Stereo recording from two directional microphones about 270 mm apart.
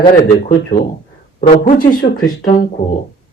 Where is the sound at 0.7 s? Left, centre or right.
Left.